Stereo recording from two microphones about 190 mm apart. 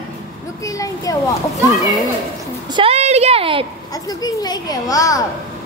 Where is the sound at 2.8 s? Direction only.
35° right (ahead or behind).